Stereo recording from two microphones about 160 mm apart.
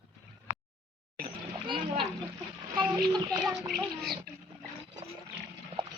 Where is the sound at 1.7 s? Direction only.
30° right (ahead or behind).